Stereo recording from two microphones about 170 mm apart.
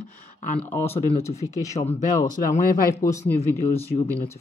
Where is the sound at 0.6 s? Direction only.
15° left (ahead or behind).